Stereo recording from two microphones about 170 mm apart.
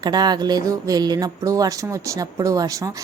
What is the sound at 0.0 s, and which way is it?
A woman's voice, 25° right (ahead or behind).